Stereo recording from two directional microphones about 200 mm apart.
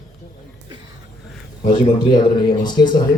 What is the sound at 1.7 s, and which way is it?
Speech, 20° left (ahead or behind).